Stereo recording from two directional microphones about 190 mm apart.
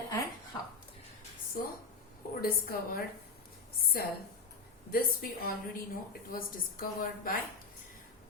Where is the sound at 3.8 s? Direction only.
50° left (ahead or behind).